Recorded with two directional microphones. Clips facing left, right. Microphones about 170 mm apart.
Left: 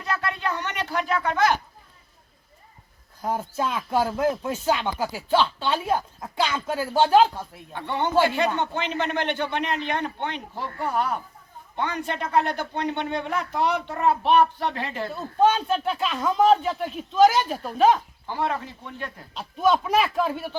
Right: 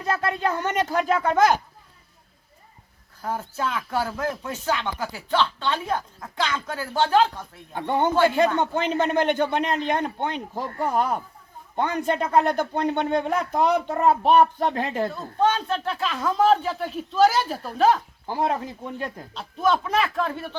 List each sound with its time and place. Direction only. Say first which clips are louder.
0.0 s speech: right 4 dB; 40° right (ahead or behind)
3.2 s speech: left 2 dB; 15° left (ahead or behind)
7.7 s a child's voice: right 3 dB; 45° right (ahead or behind)
15.1 s speech: left 7 dB; 10° left (ahead or behind)
18.3 s speech: right 2 dB; 40° right (ahead or behind)
19.3 s speech: left 1 dB; centre (ahead or behind)